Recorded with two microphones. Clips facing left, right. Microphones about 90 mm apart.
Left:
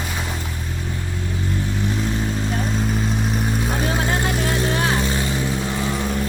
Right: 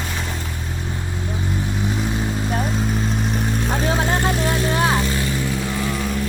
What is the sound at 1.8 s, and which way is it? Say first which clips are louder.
Vehicle: even; 10° right (ahead or behind).